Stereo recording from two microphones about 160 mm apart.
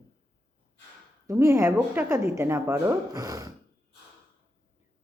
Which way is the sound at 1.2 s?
20° right (ahead or behind).